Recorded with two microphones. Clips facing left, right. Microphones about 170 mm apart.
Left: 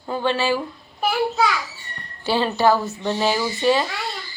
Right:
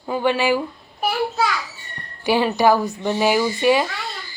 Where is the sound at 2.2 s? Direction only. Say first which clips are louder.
Right 2 dB; 15° right (ahead or behind).